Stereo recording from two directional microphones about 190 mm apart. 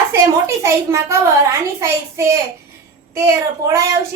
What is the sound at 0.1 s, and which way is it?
A woman's voice, 15° right (ahead or behind).